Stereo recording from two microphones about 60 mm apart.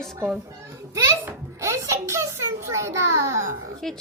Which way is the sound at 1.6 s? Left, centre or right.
Right.